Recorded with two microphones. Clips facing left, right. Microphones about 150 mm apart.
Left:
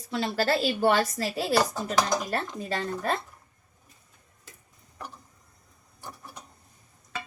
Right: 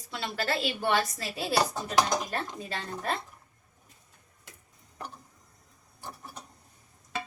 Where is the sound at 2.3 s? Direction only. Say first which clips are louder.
Left 4 dB; 40° left (ahead or behind).